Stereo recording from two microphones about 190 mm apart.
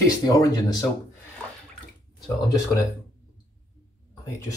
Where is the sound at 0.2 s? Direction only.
20° left (ahead or behind).